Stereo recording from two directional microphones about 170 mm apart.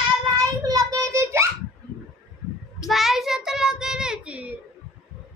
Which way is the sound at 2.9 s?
Centre (ahead or behind).